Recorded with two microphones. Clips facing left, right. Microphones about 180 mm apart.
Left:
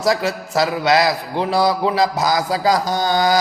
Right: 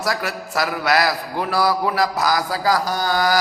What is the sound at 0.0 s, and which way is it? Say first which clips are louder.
A man's voice: left 6 dB; 25° left (ahead or behind).